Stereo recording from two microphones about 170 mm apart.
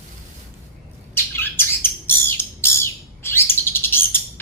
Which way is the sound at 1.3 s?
15° left (ahead or behind).